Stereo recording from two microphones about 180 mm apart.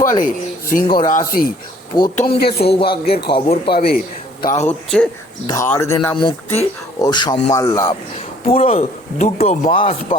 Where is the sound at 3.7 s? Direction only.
55° left (ahead or behind).